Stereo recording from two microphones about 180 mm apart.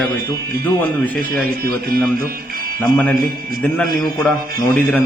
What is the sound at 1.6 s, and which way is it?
Speech, 55° right (ahead or behind).